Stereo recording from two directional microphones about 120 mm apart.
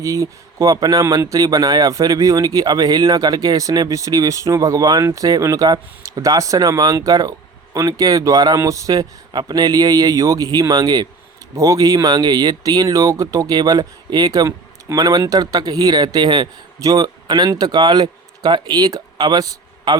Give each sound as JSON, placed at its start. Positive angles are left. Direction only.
{"t": 0.0, "sound": "speech", "side_deg": -30}